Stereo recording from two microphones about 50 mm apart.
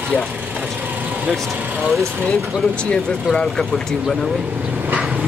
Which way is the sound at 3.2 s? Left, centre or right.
Centre.